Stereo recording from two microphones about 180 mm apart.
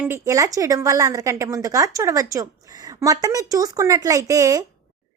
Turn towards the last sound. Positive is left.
turn(degrees=-20)  # may be behind; listen again after turning